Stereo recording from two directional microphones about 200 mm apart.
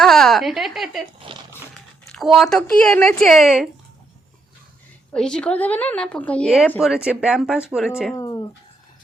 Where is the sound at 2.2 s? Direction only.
Centre (ahead or behind).